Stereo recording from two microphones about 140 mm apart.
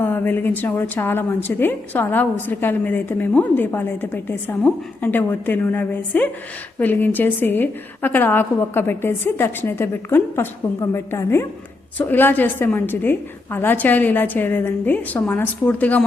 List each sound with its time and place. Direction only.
0.0 s a woman's voice: 15° left (ahead or behind)